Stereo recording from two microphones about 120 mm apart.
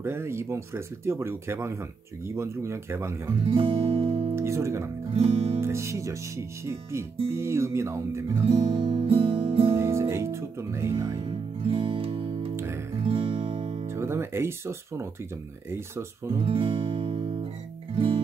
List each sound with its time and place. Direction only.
0.0 s speech: 20° right (ahead or behind)
3.4 s music: 50° right (ahead or behind)
4.4 s speech: 25° right (ahead or behind)
5.1 s music: 55° right (ahead or behind)
5.6 s speech: 25° right (ahead or behind)
8.5 s music: 55° right (ahead or behind)
9.8 s music: 25° right (ahead or behind)
11.2 s music: 50° right (ahead or behind)
13.0 s guitar: 50° right (ahead or behind)
13.9 s speech: 20° right (ahead or behind)
16.3 s music: 50° right (ahead or behind)